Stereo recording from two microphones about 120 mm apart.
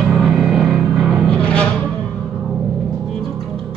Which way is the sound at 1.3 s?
10° left (ahead or behind).